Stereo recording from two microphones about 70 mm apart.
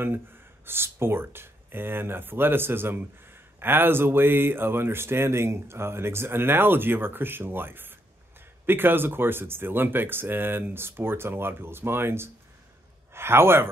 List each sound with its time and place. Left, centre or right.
0.0 s speech: right